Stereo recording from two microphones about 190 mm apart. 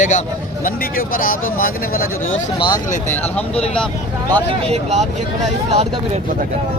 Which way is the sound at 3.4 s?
5° left (ahead or behind).